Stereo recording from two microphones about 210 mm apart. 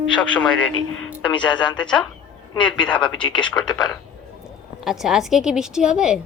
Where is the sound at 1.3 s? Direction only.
20° left (ahead or behind).